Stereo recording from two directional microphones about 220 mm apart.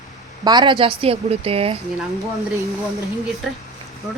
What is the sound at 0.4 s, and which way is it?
A woman's voice, 20° right (ahead or behind).